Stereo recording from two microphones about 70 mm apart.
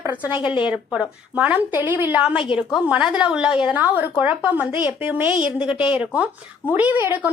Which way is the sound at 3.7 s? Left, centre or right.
Right.